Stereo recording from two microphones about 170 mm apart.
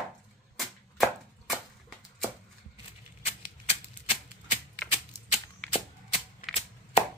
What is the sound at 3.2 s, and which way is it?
Typewriter, 35° left (ahead or behind).